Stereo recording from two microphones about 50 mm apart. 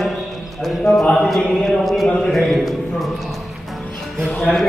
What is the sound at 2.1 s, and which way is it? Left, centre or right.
Speech, centre.